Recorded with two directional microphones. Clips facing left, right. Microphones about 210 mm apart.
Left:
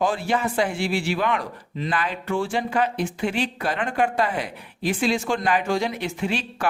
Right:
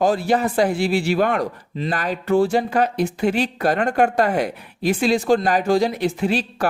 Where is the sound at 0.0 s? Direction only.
40° right (ahead or behind).